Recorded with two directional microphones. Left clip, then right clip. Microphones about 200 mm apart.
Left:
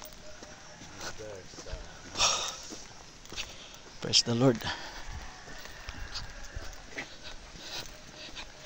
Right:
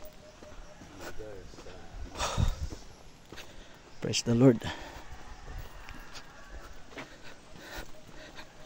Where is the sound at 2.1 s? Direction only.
40° right (ahead or behind).